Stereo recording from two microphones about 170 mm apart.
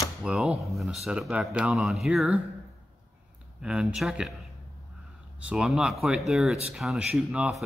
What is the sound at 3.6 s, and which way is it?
Speech, 5° right (ahead or behind).